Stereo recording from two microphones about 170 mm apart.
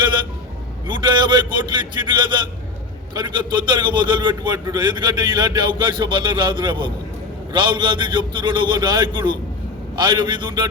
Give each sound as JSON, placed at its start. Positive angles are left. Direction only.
{"t": 0.9, "sound": "a man's voice", "side_deg": -25}